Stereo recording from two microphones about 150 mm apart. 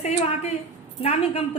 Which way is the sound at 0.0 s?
45° left (ahead or behind).